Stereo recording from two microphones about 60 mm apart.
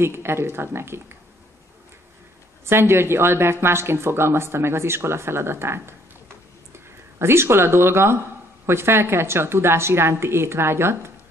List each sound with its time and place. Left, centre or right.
0.0 s a woman's voice: right
2.6 s a woman's voice: right
7.2 s a woman's voice: right